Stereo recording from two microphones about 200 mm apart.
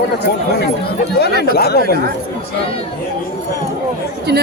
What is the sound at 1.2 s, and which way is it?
Speech, 50° left (ahead or behind).